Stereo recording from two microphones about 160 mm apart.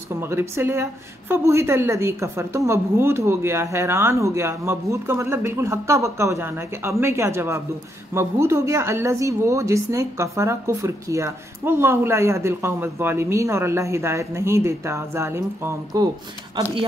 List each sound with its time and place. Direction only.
0.2 s a woman's voice: 15° right (ahead or behind)